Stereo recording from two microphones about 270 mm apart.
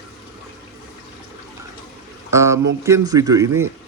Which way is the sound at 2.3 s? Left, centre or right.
Centre.